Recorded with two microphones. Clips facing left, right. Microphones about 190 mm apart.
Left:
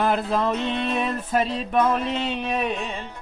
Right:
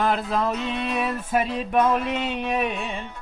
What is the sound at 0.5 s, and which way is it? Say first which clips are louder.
Music: left 2 dB; 30° left (ahead or behind).